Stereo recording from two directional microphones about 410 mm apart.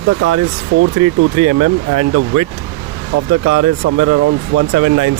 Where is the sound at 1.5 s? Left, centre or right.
Right.